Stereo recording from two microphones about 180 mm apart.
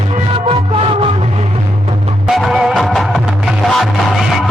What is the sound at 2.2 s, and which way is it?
Music, centre (ahead or behind).